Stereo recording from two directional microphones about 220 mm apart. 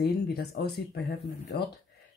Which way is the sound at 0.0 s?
45° left (ahead or behind).